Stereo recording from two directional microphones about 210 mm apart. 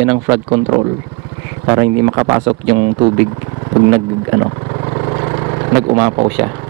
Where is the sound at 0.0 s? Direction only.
20° right (ahead or behind).